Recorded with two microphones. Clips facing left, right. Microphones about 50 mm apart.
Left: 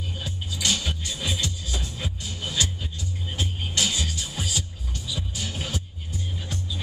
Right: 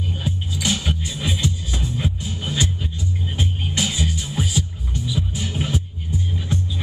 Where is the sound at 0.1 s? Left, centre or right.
Centre.